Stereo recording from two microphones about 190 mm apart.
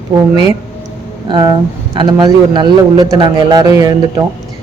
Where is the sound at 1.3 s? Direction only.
20° right (ahead or behind).